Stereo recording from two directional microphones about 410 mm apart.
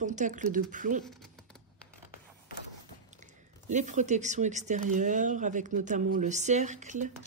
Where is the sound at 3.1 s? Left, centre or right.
Centre.